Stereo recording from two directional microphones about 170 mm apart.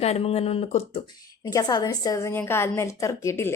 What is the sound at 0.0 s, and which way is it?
Speech, 35° left (ahead or behind).